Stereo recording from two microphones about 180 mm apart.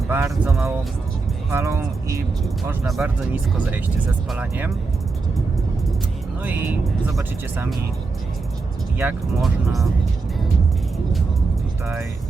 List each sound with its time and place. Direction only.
0.1 s speech: 15° right (ahead or behind)
0.5 s speech: centre (ahead or behind)
1.5 s speech: 15° right (ahead or behind)
2.8 s speech: centre (ahead or behind)
6.4 s speech: 10° right (ahead or behind)
9.0 s speech: 5° right (ahead or behind)